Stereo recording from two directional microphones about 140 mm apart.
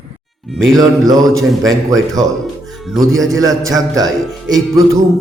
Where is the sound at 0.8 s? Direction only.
25° right (ahead or behind).